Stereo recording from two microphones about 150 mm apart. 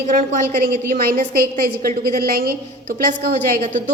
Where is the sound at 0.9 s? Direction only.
80° right.